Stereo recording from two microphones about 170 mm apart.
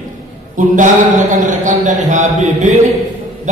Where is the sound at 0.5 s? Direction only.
50° right (ahead or behind).